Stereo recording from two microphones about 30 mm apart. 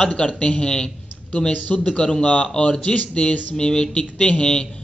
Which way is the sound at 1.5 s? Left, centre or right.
Left.